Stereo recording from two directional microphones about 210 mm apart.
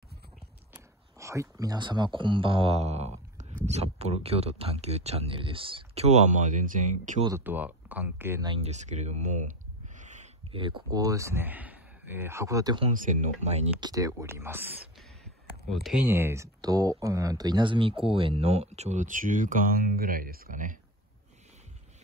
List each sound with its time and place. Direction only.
0.7 s a sound: 15° right (ahead or behind)
2.1 s speech: 25° right (ahead or behind)
7.2 s speech: 10° right (ahead or behind)
8.5 s speech: 30° right (ahead or behind)
12.9 s speech: 40° right (ahead or behind)
13.8 s speech: 15° right (ahead or behind); by 16.0 s centre (ahead or behind)
16.1 s speech: 10° right (ahead or behind); by 20.7 s 40° right (ahead or behind)